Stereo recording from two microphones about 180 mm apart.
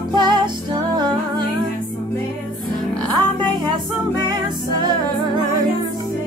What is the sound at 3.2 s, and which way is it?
Music, 25° right (ahead or behind).